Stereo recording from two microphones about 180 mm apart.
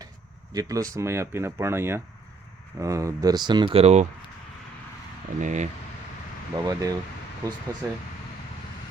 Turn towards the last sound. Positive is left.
turn(degrees=-15)  # may be behind; listen again after turning